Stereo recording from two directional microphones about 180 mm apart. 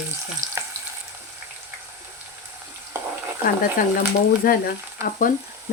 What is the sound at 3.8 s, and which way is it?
Speech, 50° left (ahead or behind).